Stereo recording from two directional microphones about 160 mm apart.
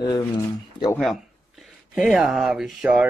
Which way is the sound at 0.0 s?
20° left (ahead or behind).